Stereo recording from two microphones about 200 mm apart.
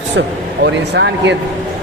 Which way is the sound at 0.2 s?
60° right (ahead or behind).